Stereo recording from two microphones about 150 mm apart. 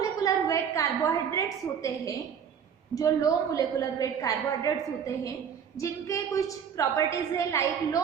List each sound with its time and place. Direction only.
0.2 s a woman's voice: 20° left (ahead or behind)
5.7 s a woman's voice: 20° left (ahead or behind)